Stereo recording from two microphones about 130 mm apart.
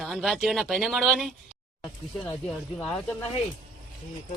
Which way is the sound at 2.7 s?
15° left (ahead or behind).